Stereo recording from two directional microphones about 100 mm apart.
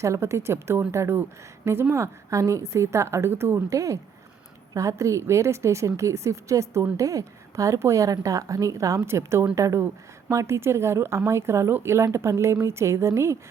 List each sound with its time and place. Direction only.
0.0 s a woman's voice: 30° right (ahead or behind)